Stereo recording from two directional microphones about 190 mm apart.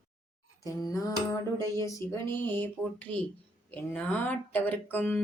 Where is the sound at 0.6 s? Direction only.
20° left (ahead or behind).